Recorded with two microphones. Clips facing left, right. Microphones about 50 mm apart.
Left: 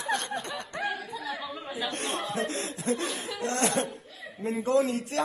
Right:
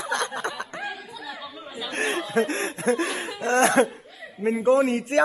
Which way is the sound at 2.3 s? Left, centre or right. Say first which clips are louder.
Right 7 dB; right.